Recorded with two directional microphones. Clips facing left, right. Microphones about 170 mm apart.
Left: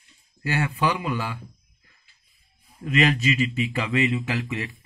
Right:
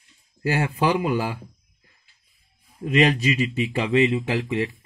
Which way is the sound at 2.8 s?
30° right (ahead or behind).